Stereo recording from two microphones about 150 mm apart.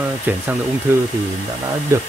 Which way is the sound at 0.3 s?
10° right (ahead or behind).